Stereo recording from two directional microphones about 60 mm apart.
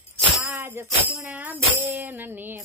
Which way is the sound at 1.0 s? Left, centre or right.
Right.